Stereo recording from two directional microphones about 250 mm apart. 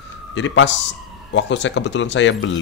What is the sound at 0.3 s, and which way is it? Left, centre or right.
Speech, left.